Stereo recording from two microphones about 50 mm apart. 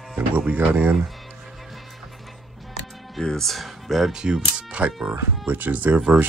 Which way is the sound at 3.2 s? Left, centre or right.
Centre.